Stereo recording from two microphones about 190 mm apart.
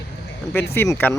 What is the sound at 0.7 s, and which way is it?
Speech, 15° left (ahead or behind).